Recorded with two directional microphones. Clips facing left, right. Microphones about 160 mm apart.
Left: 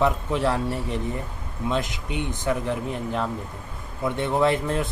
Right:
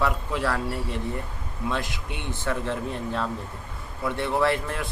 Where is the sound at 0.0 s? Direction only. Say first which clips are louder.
Left 4 dB; 20° left (ahead or behind).